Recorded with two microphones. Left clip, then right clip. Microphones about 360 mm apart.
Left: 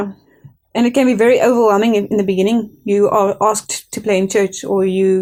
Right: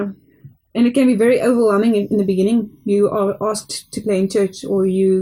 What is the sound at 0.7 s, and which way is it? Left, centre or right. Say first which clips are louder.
Speech: left 2 dB; centre.